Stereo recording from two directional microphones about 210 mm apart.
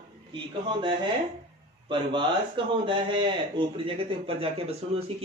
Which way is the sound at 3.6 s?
25° right (ahead or behind).